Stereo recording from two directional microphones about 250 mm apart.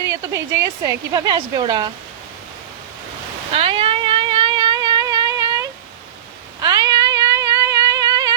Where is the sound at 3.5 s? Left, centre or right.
Right.